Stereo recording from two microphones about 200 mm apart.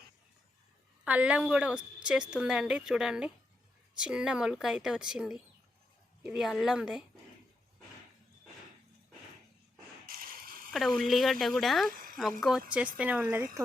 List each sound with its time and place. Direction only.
1.0 s a woman's voice: 5° right (ahead or behind)
10.1 s a sound: 45° right (ahead or behind)
10.7 s a woman's voice: centre (ahead or behind)